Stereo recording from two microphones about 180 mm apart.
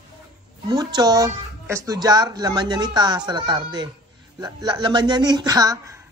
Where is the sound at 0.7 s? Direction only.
20° right (ahead or behind).